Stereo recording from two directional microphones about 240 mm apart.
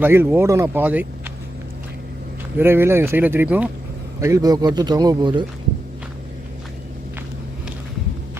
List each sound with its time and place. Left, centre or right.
0.0 s a man's voice: centre
2.6 s a man's voice: centre